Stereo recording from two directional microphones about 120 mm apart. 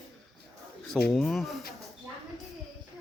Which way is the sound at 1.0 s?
5° left (ahead or behind).